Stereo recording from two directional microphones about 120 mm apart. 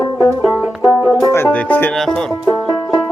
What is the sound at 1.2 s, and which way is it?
Music, 25° left (ahead or behind).